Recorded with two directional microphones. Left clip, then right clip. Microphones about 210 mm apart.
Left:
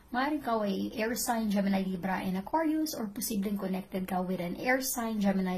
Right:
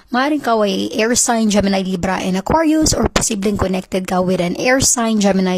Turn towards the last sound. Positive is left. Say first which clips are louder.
# right 16 dB
turn(degrees=-45)  # may be behind; listen again after turning